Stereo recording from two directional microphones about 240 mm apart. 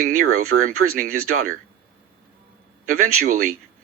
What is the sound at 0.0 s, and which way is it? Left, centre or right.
Speech, right.